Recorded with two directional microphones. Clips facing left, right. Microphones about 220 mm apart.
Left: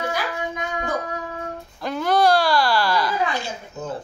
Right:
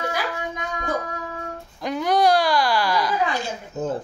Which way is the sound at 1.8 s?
15° right (ahead or behind).